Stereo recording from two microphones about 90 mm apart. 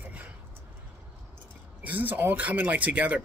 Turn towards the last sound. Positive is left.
turn(degrees=-15)  # may be behind; listen again after turning